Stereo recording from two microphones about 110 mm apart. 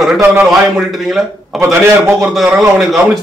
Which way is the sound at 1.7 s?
25° right (ahead or behind).